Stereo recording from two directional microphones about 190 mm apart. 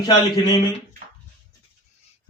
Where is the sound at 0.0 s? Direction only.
20° left (ahead or behind).